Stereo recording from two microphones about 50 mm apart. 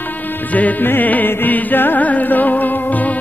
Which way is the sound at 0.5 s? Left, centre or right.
Left.